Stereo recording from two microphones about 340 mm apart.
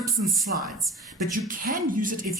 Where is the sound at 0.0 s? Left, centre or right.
Centre.